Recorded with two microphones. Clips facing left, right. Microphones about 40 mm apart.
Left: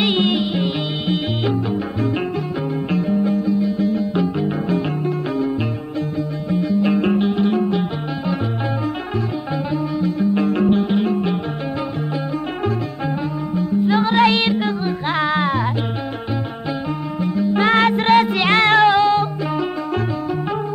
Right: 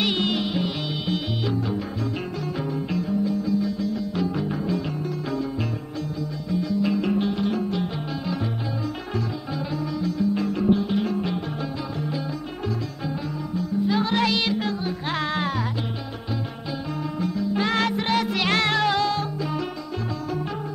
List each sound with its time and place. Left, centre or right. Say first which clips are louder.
0.0 s music: left 6 dB; left
2.9 s music: left 7 dB; left
6.5 s music: left 6 dB; left
9.9 s music: left 5 dB; left
11.0 s music: left 6 dB; left
13.6 s music: left 6 dB; left
17.2 s music: left 7 dB; left
18.3 s music: left 8 dB; left